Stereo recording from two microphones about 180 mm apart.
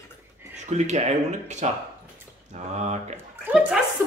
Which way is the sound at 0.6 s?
40° right (ahead or behind).